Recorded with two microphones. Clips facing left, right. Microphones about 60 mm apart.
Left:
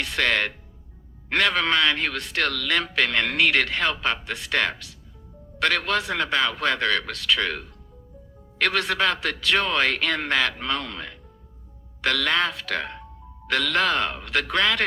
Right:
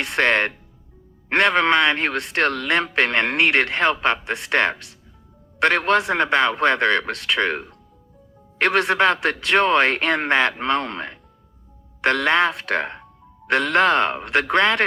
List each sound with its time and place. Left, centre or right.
0.0 s speech: right